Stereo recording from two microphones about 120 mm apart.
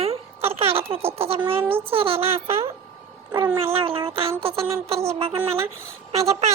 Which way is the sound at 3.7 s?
50° right (ahead or behind).